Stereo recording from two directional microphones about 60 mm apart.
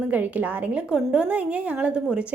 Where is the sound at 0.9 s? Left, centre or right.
Centre.